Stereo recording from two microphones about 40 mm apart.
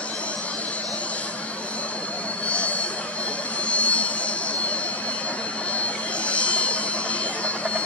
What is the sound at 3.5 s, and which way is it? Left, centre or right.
Vehicle, left.